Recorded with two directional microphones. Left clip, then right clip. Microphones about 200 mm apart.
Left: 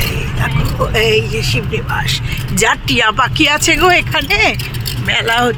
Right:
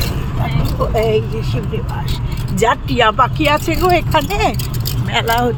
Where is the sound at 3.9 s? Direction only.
15° right (ahead or behind).